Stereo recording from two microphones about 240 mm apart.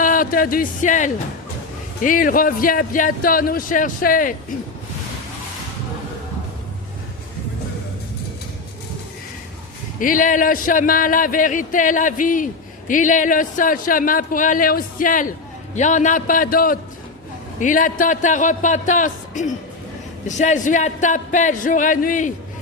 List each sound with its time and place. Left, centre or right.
0.0 s a man's voice: left
10.0 s a man's voice: left